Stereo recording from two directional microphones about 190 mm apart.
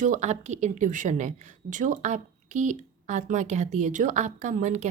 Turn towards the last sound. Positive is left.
turn(degrees=-40)  # may be behind; listen again after turning